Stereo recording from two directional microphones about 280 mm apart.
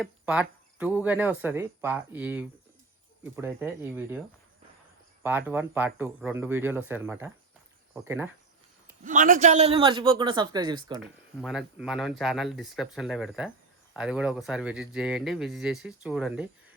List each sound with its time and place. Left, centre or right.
0.0 s speech: centre
5.2 s speech: centre
9.0 s speech: right
11.0 s speech: centre